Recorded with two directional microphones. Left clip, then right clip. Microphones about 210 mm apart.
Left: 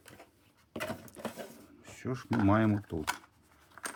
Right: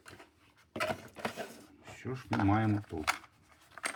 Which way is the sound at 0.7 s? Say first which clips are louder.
Right 4 dB; 15° left (ahead or behind).